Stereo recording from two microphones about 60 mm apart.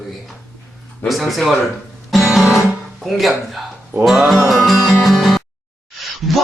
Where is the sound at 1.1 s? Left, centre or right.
Centre.